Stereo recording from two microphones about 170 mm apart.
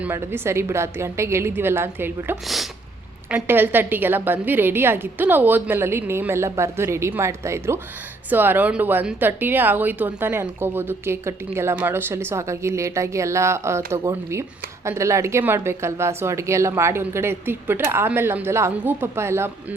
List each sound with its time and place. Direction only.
0.0 s speech: 15° right (ahead or behind)